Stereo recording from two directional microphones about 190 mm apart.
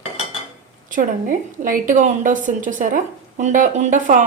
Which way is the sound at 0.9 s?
45° right (ahead or behind).